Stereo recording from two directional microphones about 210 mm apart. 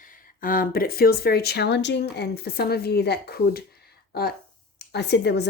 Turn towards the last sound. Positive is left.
turn(degrees=55)  # may be behind; listen again after turning